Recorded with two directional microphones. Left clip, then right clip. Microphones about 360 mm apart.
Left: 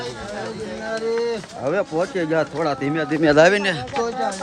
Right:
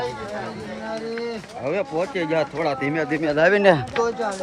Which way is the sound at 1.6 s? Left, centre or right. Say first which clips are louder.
Left 2 dB; centre.